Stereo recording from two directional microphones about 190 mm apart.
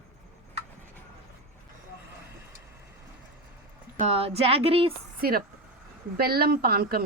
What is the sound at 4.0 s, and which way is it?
Speech, 30° right (ahead or behind).